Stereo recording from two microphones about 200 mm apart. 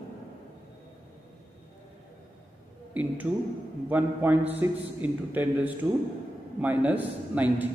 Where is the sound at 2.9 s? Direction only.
5° right (ahead or behind).